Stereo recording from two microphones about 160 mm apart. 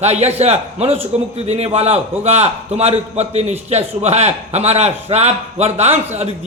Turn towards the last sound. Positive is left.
turn(degrees=-40)  # may be behind; listen again after turning